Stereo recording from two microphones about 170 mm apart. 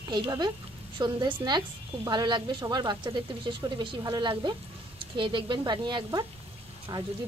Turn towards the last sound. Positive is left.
turn(degrees=-25)  # may be behind; listen again after turning